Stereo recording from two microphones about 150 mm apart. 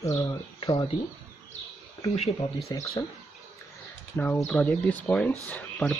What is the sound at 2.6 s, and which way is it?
Speech, 25° left (ahead or behind).